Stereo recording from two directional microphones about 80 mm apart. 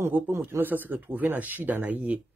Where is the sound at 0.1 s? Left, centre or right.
Right.